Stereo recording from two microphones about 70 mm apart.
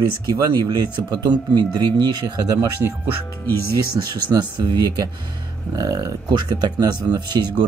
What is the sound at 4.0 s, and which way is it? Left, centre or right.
Speech, right.